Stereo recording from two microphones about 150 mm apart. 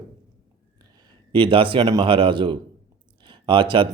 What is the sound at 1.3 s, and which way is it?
Speech, 35° right (ahead or behind).